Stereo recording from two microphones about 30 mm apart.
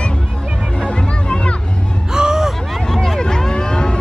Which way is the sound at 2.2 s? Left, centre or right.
Right.